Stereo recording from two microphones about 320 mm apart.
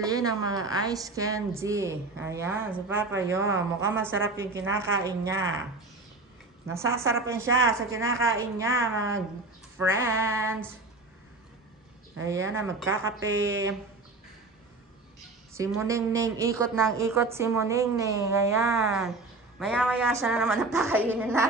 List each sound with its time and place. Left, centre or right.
0.0 s a woman's voice: centre
6.7 s a woman's voice: centre
8.0 s a woman's voice: right
8.5 s a woman's voice: centre
12.8 s a woman's voice: right
15.5 s a woman's voice: centre